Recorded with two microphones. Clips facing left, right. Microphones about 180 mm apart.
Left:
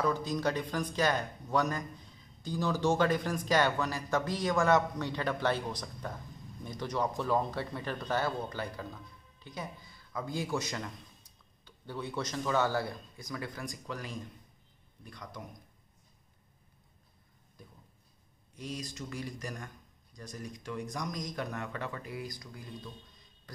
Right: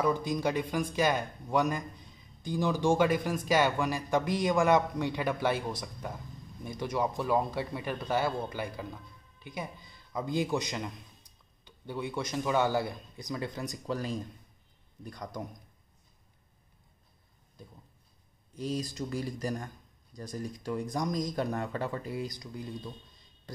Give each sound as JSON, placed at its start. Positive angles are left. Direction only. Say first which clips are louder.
{"t": 0.0, "sound": "a man's voice", "louder": "right 2 dB", "side_deg": -15}
{"t": 18.6, "sound": "speech", "louder": "right 7 dB", "side_deg": -35}